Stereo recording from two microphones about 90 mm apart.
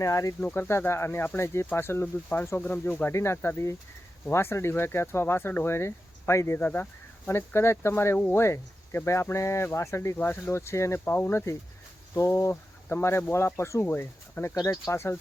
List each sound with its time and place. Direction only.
0.0 s speech: 35° left (ahead or behind)
0.3 s speech: 20° left (ahead or behind)
14.5 s speech: 40° left (ahead or behind)